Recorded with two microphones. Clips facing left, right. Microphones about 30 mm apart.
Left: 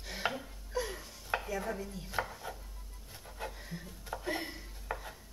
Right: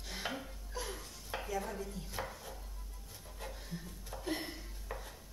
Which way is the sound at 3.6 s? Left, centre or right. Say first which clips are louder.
Left 1 dB; left.